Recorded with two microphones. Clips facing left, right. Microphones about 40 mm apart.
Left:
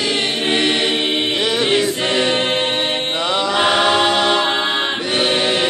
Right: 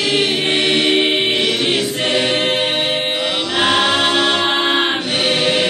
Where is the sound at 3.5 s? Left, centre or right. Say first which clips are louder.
Even; centre.